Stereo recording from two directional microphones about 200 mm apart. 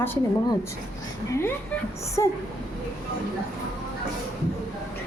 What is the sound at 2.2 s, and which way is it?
Speech, 15° left (ahead or behind).